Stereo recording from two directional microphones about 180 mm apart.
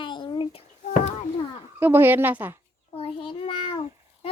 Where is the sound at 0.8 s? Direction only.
40° left (ahead or behind).